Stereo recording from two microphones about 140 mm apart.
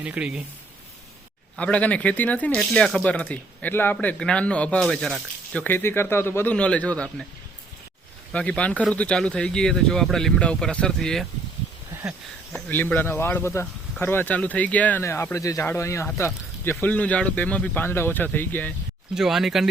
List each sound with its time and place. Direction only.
0.0 s speech: 10° right (ahead or behind)
1.5 s speech: 10° left (ahead or behind)
5.6 s speech: 15° left (ahead or behind)
8.3 s speech: 10° left (ahead or behind)
12.5 s speech: 15° left (ahead or behind)
19.1 s speech: 5° right (ahead or behind)